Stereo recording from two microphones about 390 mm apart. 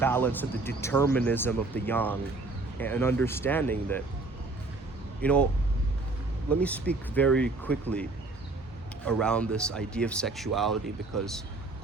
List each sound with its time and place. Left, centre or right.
0.0 s speech: centre
5.2 s speech: centre
6.6 s speech: centre
9.0 s speech: centre